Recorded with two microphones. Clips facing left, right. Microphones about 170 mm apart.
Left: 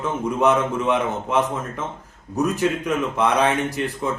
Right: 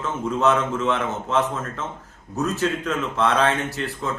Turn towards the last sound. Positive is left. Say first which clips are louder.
# left 3 dB
turn(degrees=15)  # may be behind; listen again after turning